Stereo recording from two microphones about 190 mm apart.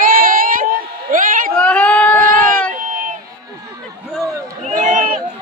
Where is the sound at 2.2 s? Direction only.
45° right (ahead or behind).